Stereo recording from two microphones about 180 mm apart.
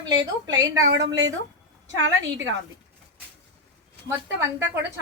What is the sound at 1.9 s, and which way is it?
Speech, 90° right.